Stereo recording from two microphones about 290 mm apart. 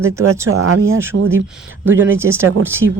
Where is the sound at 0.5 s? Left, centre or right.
Right.